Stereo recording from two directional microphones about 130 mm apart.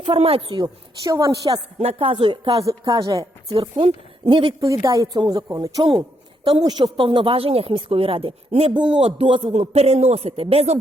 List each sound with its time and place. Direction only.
0.0 s a woman's voice: 50° right (ahead or behind); by 1.6 s 30° right (ahead or behind)
1.8 s a woman's voice: 45° right (ahead or behind); by 3.2 s 30° right (ahead or behind)
3.5 s a woman's voice: 45° right (ahead or behind)
4.6 s a woman's voice: 25° right (ahead or behind)
6.8 s speech: 40° right (ahead or behind)